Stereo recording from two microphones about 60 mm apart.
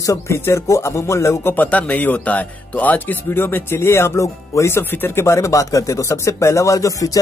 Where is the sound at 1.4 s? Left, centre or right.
Left.